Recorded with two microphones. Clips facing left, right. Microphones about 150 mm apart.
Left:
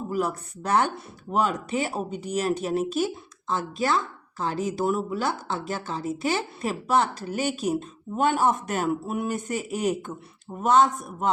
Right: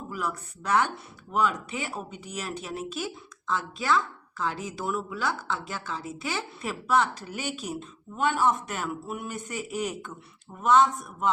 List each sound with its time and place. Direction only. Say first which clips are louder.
0.1 s speech: left 5 dB; 40° left (ahead or behind)